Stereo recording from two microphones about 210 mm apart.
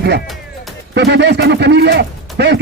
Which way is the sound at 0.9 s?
55° right (ahead or behind).